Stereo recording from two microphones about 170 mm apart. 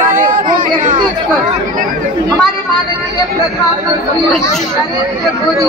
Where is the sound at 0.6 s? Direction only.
50° right (ahead or behind).